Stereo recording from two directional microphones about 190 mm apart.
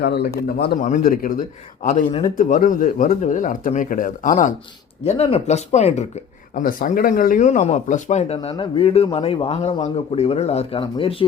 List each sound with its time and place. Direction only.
0.0 s a man's voice: 60° left (ahead or behind); by 4.5 s 40° left (ahead or behind)
5.0 s speech: 30° left (ahead or behind)
6.6 s speech: 45° left (ahead or behind); by 11.3 s 30° left (ahead or behind)